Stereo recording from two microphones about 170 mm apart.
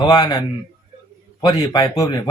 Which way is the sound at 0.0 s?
25° left (ahead or behind).